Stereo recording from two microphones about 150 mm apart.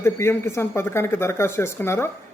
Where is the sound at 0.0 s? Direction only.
15° left (ahead or behind).